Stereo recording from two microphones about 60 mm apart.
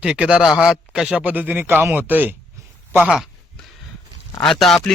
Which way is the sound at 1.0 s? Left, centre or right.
Centre.